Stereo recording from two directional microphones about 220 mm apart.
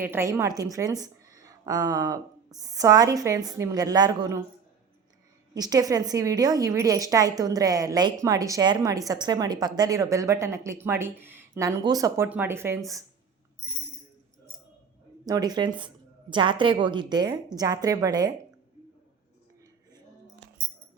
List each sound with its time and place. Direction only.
0.0 s a woman's voice: 10° right (ahead or behind)
5.5 s a woman's voice: 15° right (ahead or behind)
15.3 s a woman's voice: 20° right (ahead or behind)